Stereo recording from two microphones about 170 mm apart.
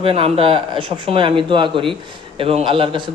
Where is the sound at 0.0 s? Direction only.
35° right (ahead or behind).